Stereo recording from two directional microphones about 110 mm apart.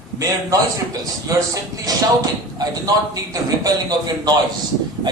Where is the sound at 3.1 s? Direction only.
35° right (ahead or behind).